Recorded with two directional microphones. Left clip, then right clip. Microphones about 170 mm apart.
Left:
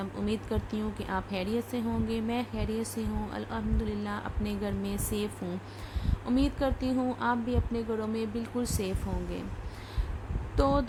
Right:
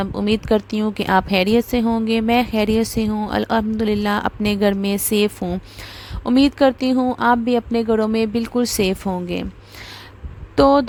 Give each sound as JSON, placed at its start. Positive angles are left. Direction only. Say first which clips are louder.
{"t": 0.0, "sound": "a woman's voice", "louder": "right 13 dB", "side_deg": -50}
{"t": 10.5, "sound": "speech", "louder": "right 14 dB", "side_deg": -50}